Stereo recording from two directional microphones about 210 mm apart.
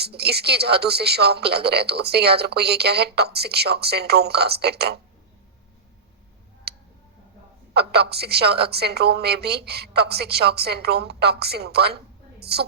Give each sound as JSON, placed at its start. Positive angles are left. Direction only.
{"t": 0.0, "sound": "speech", "side_deg": -50}
{"t": 7.8, "sound": "speech", "side_deg": -50}